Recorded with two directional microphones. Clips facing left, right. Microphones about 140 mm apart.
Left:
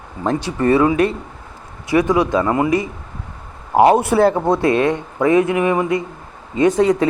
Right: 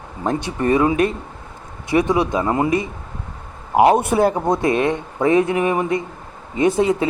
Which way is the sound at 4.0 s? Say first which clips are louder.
Left 3 dB; 20° right (ahead or behind).